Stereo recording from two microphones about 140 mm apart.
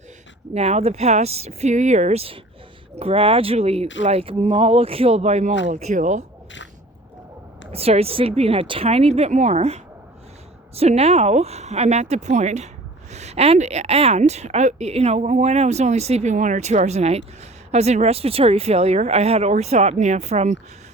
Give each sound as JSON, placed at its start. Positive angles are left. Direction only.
{"t": 0.5, "sound": "speech", "side_deg": -50}
{"t": 7.7, "sound": "speech", "side_deg": -45}